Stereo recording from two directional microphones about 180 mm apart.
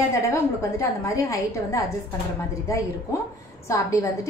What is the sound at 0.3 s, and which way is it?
A woman's voice, 15° left (ahead or behind).